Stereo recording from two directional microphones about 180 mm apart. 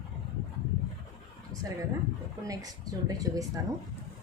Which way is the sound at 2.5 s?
20° right (ahead or behind).